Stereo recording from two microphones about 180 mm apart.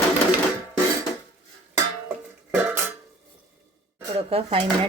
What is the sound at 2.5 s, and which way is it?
Dishes, 10° right (ahead or behind).